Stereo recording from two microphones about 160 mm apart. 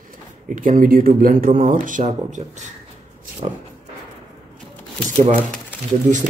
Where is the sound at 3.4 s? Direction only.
40° right (ahead or behind).